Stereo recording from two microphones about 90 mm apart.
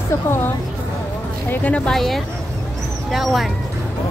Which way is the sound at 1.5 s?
15° left (ahead or behind).